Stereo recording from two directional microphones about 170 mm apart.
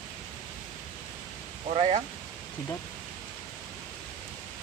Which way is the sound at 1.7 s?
35° right (ahead or behind).